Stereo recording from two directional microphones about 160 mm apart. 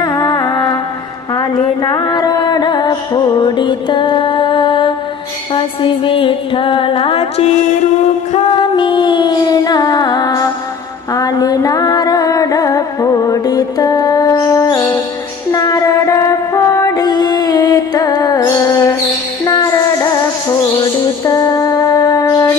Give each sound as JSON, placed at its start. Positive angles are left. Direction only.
{"t": 0.0, "sound": "music", "side_deg": 25}
{"t": 8.5, "sound": "music", "side_deg": 30}